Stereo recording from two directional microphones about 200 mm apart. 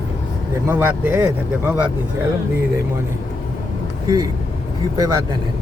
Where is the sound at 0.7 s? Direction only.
10° right (ahead or behind).